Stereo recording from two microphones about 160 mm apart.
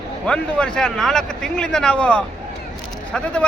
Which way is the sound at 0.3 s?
5° left (ahead or behind).